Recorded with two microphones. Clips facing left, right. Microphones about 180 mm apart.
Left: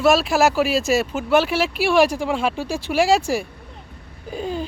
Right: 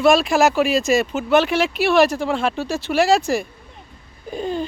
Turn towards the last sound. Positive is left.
turn(degrees=5)  # may be behind; listen again after turning